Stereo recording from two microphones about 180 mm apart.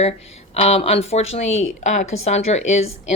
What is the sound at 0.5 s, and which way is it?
A woman's voice, 35° left (ahead or behind).